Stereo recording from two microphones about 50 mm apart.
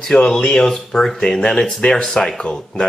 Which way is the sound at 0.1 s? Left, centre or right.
Left.